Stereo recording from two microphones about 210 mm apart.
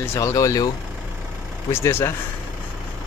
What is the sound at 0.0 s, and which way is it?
Speech, 15° left (ahead or behind).